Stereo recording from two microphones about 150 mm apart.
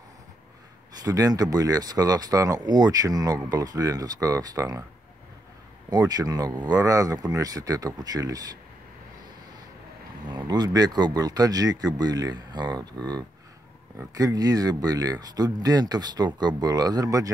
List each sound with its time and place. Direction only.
1.0 s speech: 25° right (ahead or behind)
5.9 s speech: 25° right (ahead or behind)
10.3 s speech: 30° right (ahead or behind)